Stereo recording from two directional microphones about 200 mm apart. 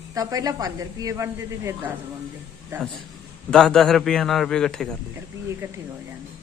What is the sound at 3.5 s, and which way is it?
A man's voice, 5° left (ahead or behind).